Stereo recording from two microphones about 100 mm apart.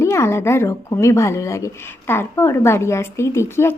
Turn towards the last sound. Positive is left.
turn(degrees=25)  # may be behind; listen again after turning